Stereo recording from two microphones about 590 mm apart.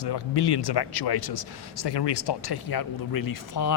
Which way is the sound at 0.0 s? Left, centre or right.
Left.